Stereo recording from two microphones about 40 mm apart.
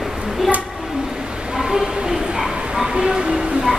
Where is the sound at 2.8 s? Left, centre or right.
Right.